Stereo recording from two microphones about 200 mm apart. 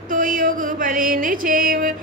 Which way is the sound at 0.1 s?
45° right (ahead or behind).